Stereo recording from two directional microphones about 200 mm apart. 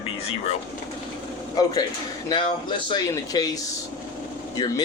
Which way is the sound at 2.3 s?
25° left (ahead or behind).